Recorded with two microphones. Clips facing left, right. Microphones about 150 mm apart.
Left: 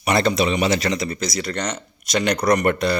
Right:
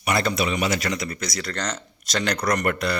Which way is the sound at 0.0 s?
30° left (ahead or behind).